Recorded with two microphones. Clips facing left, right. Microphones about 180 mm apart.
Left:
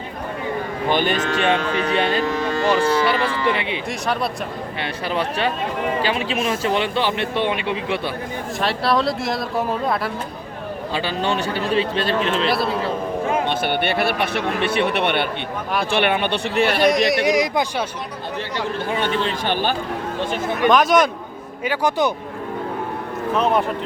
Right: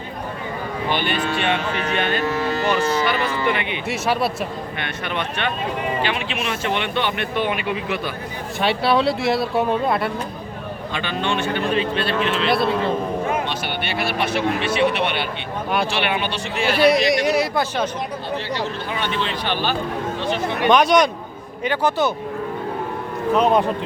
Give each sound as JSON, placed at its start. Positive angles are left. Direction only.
{"t": 0.9, "sound": "speech", "side_deg": 45}
{"t": 3.8, "sound": "speech", "side_deg": -5}
{"t": 4.8, "sound": "speech", "side_deg": 35}
{"t": 8.6, "sound": "speech", "side_deg": 0}
{"t": 10.9, "sound": "speech", "side_deg": 35}
{"t": 12.5, "sound": "speech", "side_deg": 0}
{"t": 13.5, "sound": "speech", "side_deg": 55}
{"t": 17.2, "sound": "speech", "side_deg": 15}
{"t": 19.0, "sound": "speech", "side_deg": 45}
{"t": 20.7, "sound": "speech", "side_deg": 0}
{"t": 23.3, "sound": "speech", "side_deg": -15}